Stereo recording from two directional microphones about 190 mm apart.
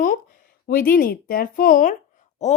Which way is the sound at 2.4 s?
35° left (ahead or behind).